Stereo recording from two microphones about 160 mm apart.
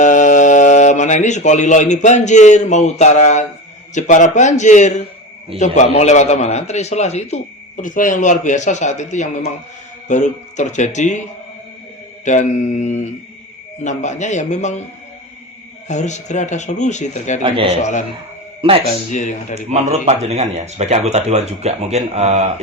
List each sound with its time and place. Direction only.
0.0 s a man's voice: 50° left (ahead or behind)
12.2 s a man's voice: 50° left (ahead or behind)
15.9 s a man's voice: 50° left (ahead or behind)
17.4 s a man's voice: 35° right (ahead or behind)
19.1 s a man's voice: 50° left (ahead or behind)
19.5 s speech: 45° right (ahead or behind)